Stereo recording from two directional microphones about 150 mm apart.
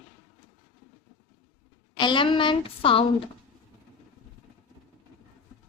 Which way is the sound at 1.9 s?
30° left (ahead or behind).